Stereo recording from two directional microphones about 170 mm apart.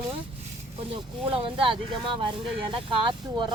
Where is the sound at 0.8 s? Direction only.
35° right (ahead or behind).